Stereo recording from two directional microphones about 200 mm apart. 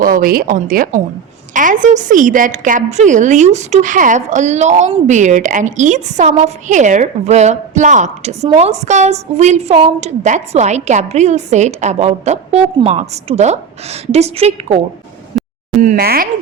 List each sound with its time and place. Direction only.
0.0 s a woman's voice: 45° right (ahead or behind)
15.3 s a sound: centre (ahead or behind)
15.8 s a woman's voice: 45° right (ahead or behind)